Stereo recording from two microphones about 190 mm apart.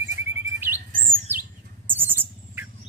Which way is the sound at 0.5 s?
10° right (ahead or behind).